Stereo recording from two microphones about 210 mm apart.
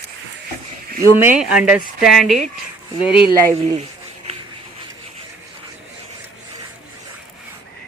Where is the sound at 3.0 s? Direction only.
25° left (ahead or behind).